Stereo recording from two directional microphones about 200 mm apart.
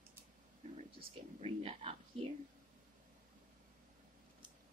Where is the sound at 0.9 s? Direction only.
30° right (ahead or behind).